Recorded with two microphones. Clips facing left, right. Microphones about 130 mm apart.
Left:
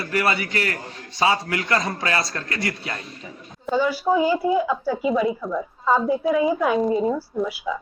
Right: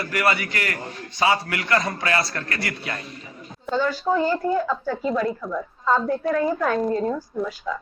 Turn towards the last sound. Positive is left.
turn(degrees=10)  # may be behind; listen again after turning